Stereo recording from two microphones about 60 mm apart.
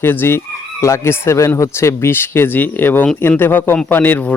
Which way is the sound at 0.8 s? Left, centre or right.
Left.